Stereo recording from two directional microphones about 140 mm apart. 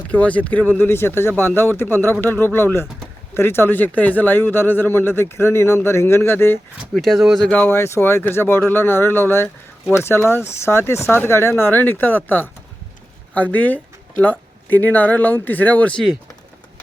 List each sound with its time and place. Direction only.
0.1 s speech: 10° left (ahead or behind)
6.9 s speech: centre (ahead or behind)
7.6 s speech: 15° left (ahead or behind)